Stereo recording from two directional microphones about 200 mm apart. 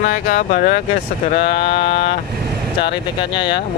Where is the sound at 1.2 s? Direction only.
30° left (ahead or behind).